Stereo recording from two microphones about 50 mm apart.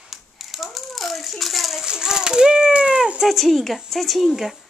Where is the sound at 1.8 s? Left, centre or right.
Centre.